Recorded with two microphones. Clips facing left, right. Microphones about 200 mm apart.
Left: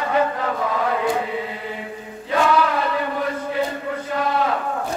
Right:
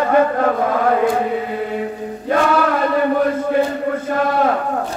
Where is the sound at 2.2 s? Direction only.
50° right (ahead or behind).